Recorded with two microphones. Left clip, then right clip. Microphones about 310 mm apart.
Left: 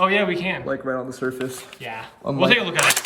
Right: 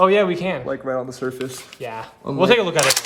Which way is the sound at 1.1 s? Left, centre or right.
Centre.